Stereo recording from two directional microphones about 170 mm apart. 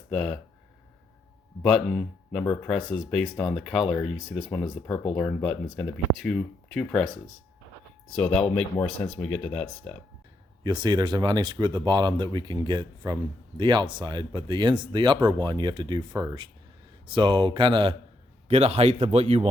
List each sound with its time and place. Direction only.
0.1 s speech: 5° left (ahead or behind)
1.6 s speech: 5° left (ahead or behind)
10.6 s a man's voice: 25° right (ahead or behind)